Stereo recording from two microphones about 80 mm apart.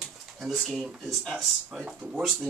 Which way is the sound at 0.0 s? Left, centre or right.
Centre.